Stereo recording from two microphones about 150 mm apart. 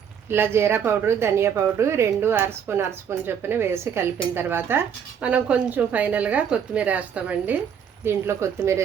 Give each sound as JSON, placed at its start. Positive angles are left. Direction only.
{"t": 0.3, "sound": "a woman's voice", "side_deg": -15}